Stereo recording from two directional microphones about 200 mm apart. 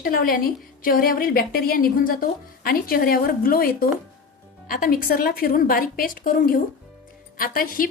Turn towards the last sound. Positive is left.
turn(degrees=45)  # may be behind; listen again after turning